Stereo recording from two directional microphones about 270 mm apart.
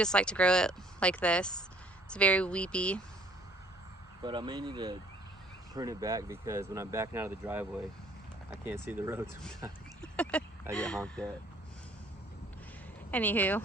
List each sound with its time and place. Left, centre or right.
0.0 s speech: centre
4.2 s speech: centre
10.0 s a sound: centre
10.7 s speech: centre
13.1 s a woman's voice: centre